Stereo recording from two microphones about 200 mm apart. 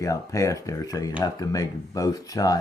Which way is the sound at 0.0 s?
15° left (ahead or behind).